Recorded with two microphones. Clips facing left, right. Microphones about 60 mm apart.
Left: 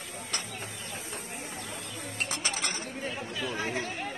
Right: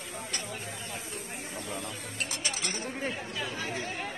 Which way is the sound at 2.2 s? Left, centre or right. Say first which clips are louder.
Left 2 dB; left.